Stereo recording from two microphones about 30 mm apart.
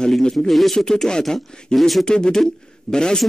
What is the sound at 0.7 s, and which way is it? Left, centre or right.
Speech, left.